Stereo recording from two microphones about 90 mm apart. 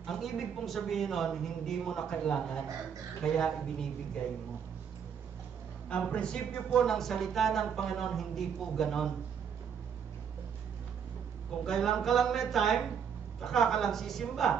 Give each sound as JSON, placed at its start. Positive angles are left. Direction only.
{"t": 0.0, "sound": "speech", "side_deg": 0}
{"t": 5.9, "sound": "speech", "side_deg": 10}
{"t": 11.6, "sound": "speech", "side_deg": 5}